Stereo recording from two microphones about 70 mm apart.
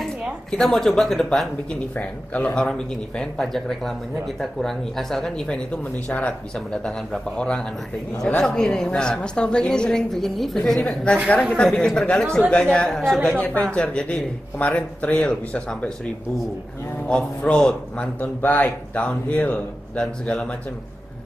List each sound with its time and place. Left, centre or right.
0.5 s speech: centre
1.7 s a woman's voice: centre
17.4 s speech: centre